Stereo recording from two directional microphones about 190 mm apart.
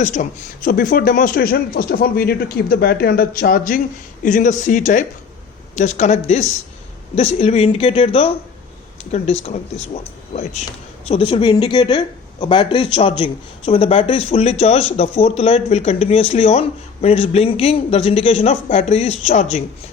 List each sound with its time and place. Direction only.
0.0 s speech: 40° left (ahead or behind)